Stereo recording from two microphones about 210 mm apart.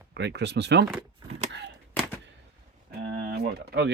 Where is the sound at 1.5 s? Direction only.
55° right (ahead or behind).